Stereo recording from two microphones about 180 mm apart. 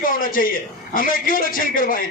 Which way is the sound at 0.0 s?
50° left (ahead or behind).